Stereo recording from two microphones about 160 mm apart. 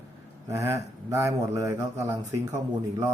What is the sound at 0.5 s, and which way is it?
A man's voice, 20° right (ahead or behind).